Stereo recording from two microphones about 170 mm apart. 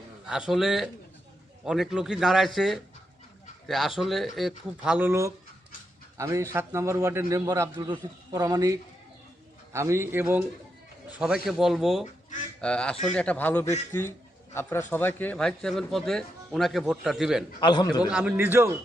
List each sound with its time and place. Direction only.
0.3 s a man's voice: 5° right (ahead or behind)
11.4 s a man's voice: centre (ahead or behind)
17.6 s a man's voice: 25° left (ahead or behind)
18.0 s a man's voice: 5° right (ahead or behind)